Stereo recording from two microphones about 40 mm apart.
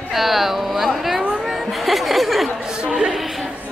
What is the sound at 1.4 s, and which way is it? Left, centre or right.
Chatter, centre.